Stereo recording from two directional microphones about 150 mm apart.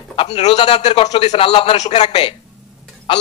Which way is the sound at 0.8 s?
50° left (ahead or behind).